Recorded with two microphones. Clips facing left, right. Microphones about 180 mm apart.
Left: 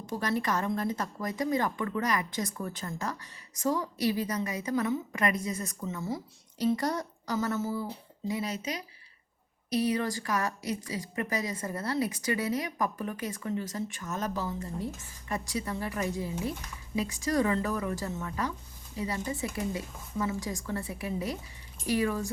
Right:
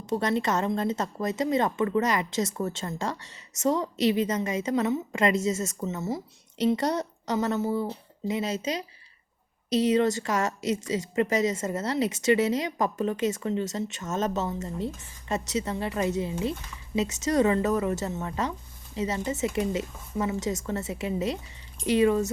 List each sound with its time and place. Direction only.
0.0 s a woman's voice: 25° right (ahead or behind)
9.6 s speech: 25° right (ahead or behind)